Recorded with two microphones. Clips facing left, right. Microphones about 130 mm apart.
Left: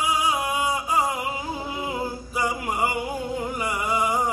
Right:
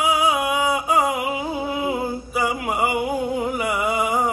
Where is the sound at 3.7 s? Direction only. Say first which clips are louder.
Right 1 dB; 65° right (ahead or behind).